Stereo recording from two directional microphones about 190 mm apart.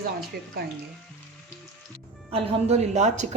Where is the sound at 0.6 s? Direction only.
55° right (ahead or behind).